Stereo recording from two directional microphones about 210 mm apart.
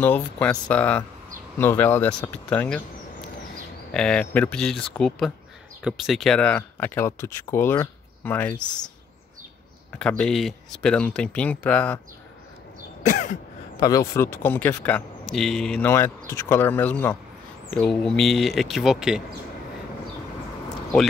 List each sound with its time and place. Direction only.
0.0 s speech: 5° left (ahead or behind)
3.9 s speech: 5° left (ahead or behind)
9.9 s speech: 5° left (ahead or behind)
13.0 s throat clearing: 35° left (ahead or behind)
13.7 s speech: 15° left (ahead or behind); by 19.2 s centre (ahead or behind)